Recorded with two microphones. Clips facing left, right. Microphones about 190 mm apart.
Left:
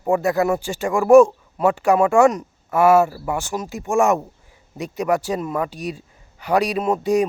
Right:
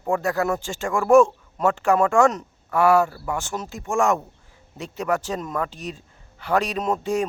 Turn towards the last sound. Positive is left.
turn(degrees=15)  # may be behind; listen again after turning